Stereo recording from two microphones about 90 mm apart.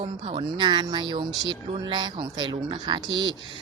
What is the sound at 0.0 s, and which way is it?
Speech, 75° right (ahead or behind).